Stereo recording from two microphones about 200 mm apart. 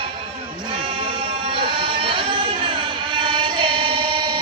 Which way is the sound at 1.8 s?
25° right (ahead or behind).